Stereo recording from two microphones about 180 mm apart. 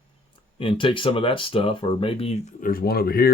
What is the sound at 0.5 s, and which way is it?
Speech, 30° left (ahead or behind).